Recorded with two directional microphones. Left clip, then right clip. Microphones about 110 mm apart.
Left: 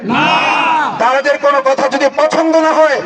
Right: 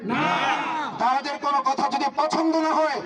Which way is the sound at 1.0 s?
40° left (ahead or behind).